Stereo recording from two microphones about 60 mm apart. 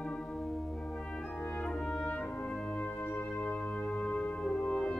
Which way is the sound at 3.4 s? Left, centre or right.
Centre.